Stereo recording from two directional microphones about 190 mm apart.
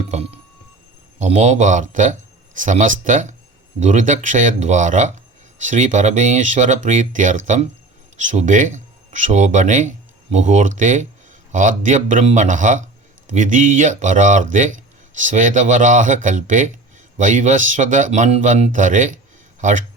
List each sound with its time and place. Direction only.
0.1 s speech: 35° right (ahead or behind)